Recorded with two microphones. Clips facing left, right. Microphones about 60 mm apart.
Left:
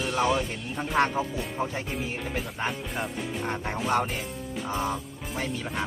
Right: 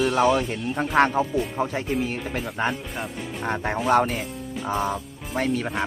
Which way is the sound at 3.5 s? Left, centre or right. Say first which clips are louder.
Right 7 dB; right.